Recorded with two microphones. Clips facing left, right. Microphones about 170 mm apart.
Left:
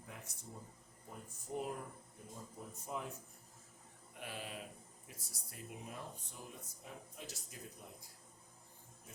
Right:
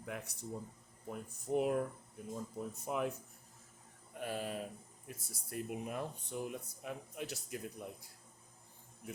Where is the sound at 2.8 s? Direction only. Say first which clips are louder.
Right 7 dB; 75° right (ahead or behind).